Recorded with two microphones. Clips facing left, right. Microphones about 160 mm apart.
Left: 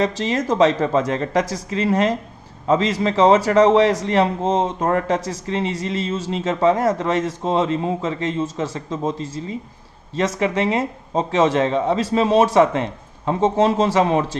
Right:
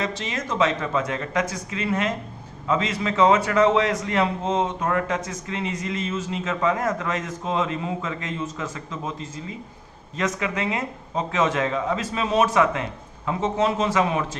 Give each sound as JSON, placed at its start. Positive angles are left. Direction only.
{"t": 0.0, "sound": "a man's voice", "side_deg": 35}